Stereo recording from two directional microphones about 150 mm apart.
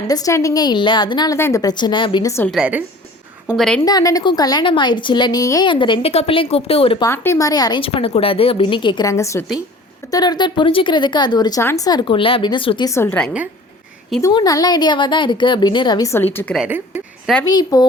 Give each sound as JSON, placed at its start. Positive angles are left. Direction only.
{"t": 0.1, "sound": "a woman's voice", "side_deg": 20}
{"t": 1.4, "sound": "a woman's voice", "side_deg": 20}
{"t": 2.5, "sound": "a woman's voice", "side_deg": -5}
{"t": 3.8, "sound": "a woman's voice", "side_deg": 25}
{"t": 7.0, "sound": "a woman's voice", "side_deg": 20}
{"t": 12.9, "sound": "a woman's voice", "side_deg": 15}
{"t": 14.2, "sound": "a woman's voice", "side_deg": 25}
{"t": 16.6, "sound": "speech", "side_deg": -15}
{"t": 17.4, "sound": "a woman's voice", "side_deg": 25}